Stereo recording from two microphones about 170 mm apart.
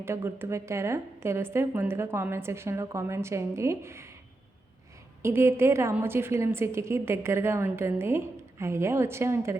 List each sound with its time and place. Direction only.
0.0 s a woman's voice: 15° right (ahead or behind)
5.2 s a woman's voice: 15° right (ahead or behind)